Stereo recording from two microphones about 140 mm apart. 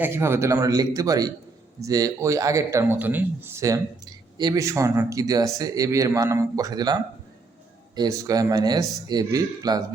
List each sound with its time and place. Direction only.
0.0 s speech: 15° right (ahead or behind)